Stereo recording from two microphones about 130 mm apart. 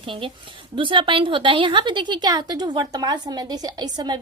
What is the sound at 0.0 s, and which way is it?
A woman's voice, 40° right (ahead or behind).